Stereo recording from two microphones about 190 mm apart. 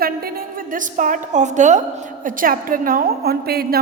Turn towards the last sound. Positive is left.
turn(degrees=-55)  # may be behind; listen again after turning